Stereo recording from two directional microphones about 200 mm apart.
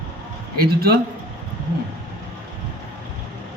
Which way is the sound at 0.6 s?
50° right (ahead or behind).